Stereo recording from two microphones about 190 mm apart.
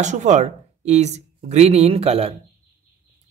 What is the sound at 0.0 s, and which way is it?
Speech, 40° right (ahead or behind).